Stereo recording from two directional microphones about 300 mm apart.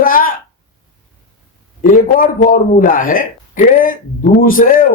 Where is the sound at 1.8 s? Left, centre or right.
Left.